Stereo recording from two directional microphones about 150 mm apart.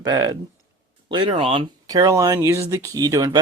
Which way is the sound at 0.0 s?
25° right (ahead or behind).